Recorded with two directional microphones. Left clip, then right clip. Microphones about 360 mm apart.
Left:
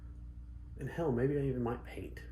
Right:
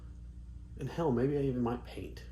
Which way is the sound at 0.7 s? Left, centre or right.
Centre.